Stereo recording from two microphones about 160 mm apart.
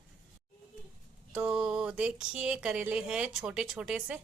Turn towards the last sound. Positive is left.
turn(degrees=-5)  # may be behind; listen again after turning